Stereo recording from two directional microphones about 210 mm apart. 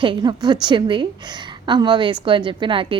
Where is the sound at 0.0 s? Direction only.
20° right (ahead or behind).